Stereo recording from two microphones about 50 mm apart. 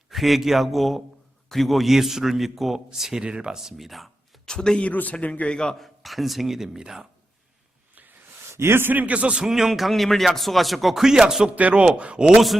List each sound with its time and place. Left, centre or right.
0.1 s a man's voice: centre
4.4 s speech: centre
4.8 s a man's voice: left
5.8 s speech: centre
8.5 s a man's voice: right
8.9 s a man's voice: right
9.4 s speech: centre
11.5 s a man's voice: right